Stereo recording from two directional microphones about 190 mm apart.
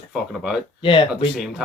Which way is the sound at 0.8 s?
25° left (ahead or behind).